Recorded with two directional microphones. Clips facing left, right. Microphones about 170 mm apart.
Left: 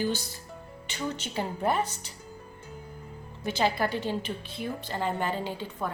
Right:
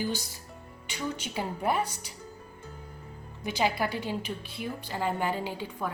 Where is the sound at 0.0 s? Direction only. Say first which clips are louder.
Left 3 dB; 10° right (ahead or behind).